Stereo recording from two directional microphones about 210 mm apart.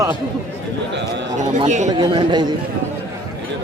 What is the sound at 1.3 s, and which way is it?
Speech, 35° right (ahead or behind).